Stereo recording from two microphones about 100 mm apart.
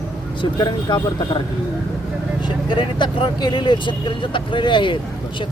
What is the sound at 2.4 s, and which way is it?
Speech, 50° left (ahead or behind).